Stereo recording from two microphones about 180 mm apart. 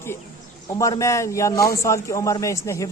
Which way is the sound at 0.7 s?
15° left (ahead or behind).